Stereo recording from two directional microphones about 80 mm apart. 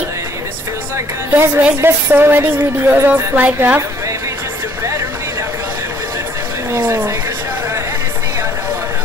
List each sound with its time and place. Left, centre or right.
0.9 s a woman's voice: right
6.7 s speech: right